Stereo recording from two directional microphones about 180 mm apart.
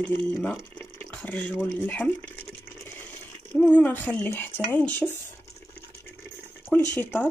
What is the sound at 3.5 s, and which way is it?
Speech, 5° left (ahead or behind).